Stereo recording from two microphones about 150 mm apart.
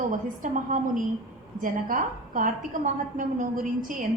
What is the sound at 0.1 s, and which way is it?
A woman's voice, 60° right (ahead or behind).